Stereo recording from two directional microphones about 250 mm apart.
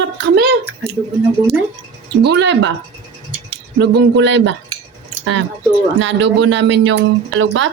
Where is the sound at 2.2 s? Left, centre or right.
Right.